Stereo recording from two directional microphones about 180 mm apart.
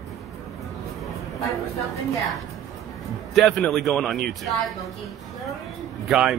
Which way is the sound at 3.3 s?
Centre (ahead or behind).